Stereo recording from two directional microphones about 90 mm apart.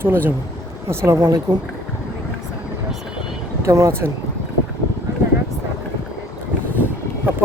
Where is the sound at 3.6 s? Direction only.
35° right (ahead or behind).